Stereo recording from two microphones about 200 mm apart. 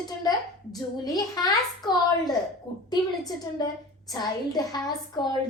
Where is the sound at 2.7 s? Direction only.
20° left (ahead or behind).